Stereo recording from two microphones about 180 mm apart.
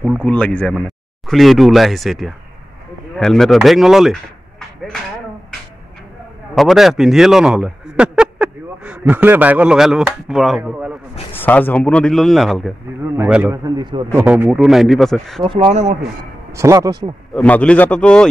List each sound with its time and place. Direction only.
0.2 s speech: 5° left (ahead or behind)
6.5 s speech: centre (ahead or behind)
11.3 s speech: 10° left (ahead or behind)
13.1 s a man's voice: 10° right (ahead or behind)
13.7 s speech: 25° right (ahead or behind)
14.1 s speech: 10° right (ahead or behind)
15.4 s speech: 25° right (ahead or behind)
15.7 s speech: 40° right (ahead or behind)
16.5 s a man's voice: 15° right (ahead or behind)
17.3 s a man's voice: 5° left (ahead or behind)